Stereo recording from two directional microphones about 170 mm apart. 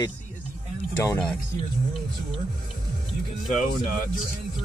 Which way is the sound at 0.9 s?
10° left (ahead or behind).